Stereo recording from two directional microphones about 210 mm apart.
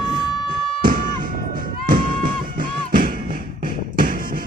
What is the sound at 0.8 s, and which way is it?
Music, 45° right (ahead or behind).